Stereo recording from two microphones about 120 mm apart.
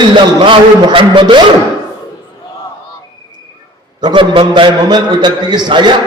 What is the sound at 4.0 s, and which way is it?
A man's voice, 40° right (ahead or behind).